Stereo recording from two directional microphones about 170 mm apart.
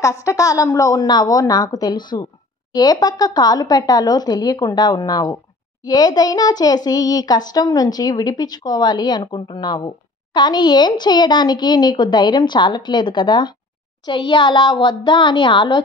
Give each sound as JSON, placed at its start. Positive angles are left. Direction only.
{"t": 0.0, "sound": "a child's voice", "side_deg": 20}